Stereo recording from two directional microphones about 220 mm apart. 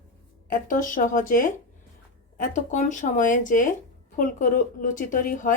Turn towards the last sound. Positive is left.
turn(degrees=40)  # may be behind; listen again after turning